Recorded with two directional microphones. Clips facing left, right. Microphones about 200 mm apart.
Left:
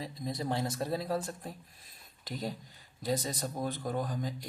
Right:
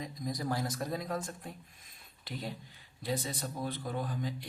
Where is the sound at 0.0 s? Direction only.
25° left (ahead or behind).